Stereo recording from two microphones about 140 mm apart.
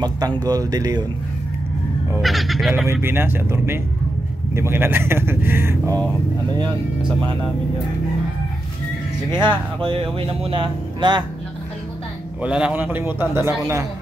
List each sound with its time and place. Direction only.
0.0 s speech: 30° right (ahead or behind)
2.2 s speech: centre (ahead or behind)
2.9 s a man's voice: 15° right (ahead or behind)
6.5 s speech: 30° right (ahead or behind)
9.4 s speech: 35° right (ahead or behind)
12.4 s a man's voice: 5° right (ahead or behind)